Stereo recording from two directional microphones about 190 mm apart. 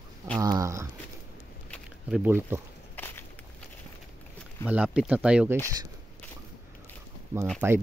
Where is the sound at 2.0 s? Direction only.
5° right (ahead or behind).